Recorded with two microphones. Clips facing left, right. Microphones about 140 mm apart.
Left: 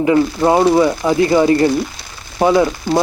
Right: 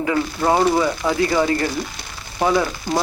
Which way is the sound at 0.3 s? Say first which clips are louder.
Left 2 dB; 20° left (ahead or behind).